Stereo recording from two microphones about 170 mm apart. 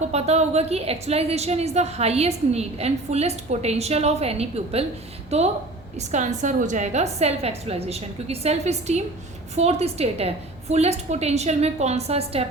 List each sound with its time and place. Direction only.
0.1 s a woman's voice: 40° right (ahead or behind)